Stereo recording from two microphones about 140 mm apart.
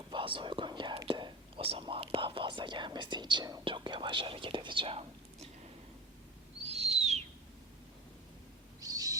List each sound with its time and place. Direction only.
0.1 s whispering: 35° right (ahead or behind)
3.7 s speech: 35° right (ahead or behind)
6.7 s owl: 50° right (ahead or behind)
8.8 s owl: 25° right (ahead or behind)